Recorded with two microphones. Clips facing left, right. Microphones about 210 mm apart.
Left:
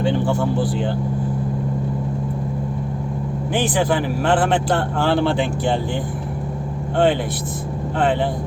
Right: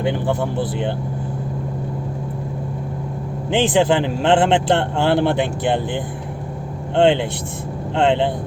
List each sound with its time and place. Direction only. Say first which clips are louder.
0.0 s speech: left 1 dB; 15° right (ahead or behind)
3.5 s speech: right 4 dB; 25° right (ahead or behind)
6.9 s speech: right 3 dB; 25° right (ahead or behind)